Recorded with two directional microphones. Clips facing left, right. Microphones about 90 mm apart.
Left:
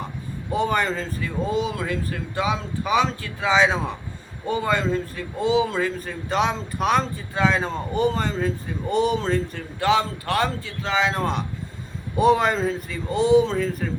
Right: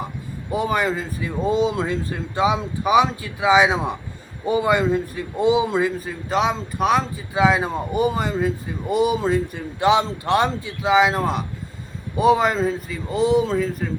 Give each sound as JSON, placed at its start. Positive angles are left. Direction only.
{"t": 0.5, "sound": "a man's voice", "side_deg": -5}